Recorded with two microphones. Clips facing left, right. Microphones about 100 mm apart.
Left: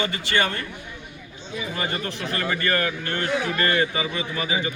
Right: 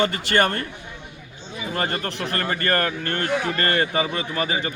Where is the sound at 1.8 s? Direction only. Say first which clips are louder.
Right 4 dB; 45° right (ahead or behind).